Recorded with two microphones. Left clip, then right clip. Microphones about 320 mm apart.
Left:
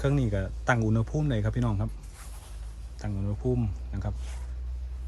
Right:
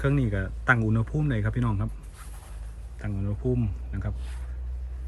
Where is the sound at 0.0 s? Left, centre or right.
Centre.